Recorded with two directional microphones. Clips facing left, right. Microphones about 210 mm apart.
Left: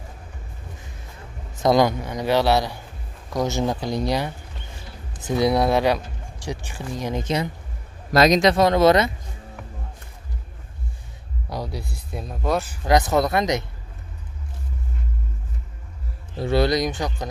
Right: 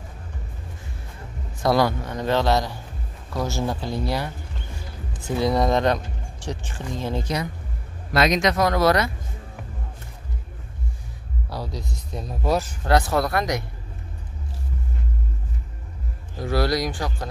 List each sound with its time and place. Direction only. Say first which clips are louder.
1.6 s speech: left 2 dB; 20° left (ahead or behind)
5.3 s speech: left 2 dB; 10° left (ahead or behind)
8.1 s speech: left 4 dB; 35° left (ahead or behind)
11.4 s speech: left 2 dB; 15° left (ahead or behind)
12.1 s speech: even; centre (ahead or behind)
12.8 s speech: left 3 dB; 20° left (ahead or behind)
16.3 s speech: left 3 dB; 25° left (ahead or behind)